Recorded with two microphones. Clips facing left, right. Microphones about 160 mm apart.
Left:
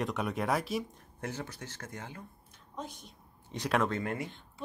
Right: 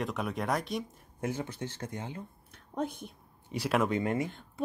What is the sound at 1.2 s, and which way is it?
Speech, 15° right (ahead or behind).